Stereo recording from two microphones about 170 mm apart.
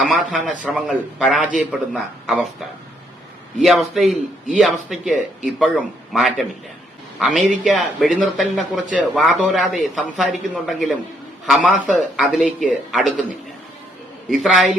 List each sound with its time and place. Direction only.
0.0 s speech: 5° right (ahead or behind)
14.3 s speech: centre (ahead or behind)